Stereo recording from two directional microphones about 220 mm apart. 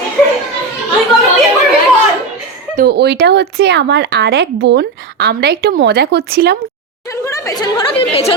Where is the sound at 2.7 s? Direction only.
45° right (ahead or behind).